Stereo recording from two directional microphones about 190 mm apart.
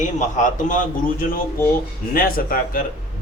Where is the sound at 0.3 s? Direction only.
40° left (ahead or behind).